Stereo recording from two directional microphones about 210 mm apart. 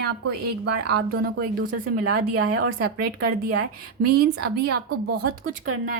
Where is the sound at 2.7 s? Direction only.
50° right (ahead or behind).